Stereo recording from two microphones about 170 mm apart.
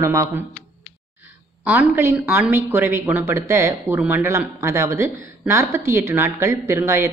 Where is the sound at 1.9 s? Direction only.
10° right (ahead or behind).